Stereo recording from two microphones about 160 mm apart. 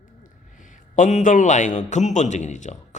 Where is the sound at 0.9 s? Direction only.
55° left (ahead or behind).